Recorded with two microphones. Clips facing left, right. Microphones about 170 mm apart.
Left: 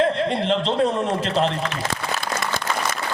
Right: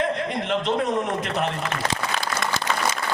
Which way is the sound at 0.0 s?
30° left (ahead or behind).